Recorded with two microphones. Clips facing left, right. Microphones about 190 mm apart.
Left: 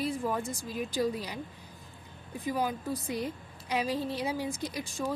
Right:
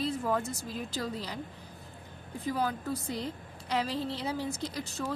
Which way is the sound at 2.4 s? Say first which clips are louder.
Even; 10° left (ahead or behind).